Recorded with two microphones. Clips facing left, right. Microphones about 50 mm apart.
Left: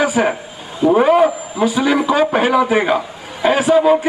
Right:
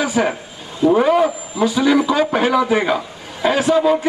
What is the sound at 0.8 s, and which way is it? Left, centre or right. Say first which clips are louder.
A man's voice: left 2 dB; left.